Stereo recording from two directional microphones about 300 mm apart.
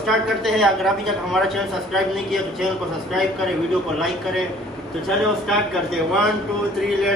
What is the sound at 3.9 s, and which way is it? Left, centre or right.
A woman's voice, centre.